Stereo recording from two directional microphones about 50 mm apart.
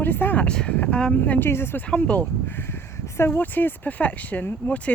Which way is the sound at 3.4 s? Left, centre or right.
Left.